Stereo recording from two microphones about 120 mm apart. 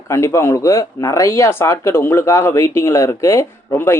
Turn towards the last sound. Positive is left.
turn(degrees=20)  # may be behind; listen again after turning